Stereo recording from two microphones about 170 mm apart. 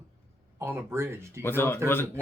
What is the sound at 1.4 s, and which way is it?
Speech, 15° left (ahead or behind).